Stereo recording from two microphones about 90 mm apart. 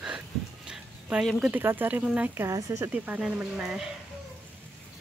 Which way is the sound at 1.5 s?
25° right (ahead or behind).